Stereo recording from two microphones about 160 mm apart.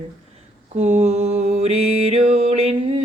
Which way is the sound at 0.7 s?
45° right (ahead or behind).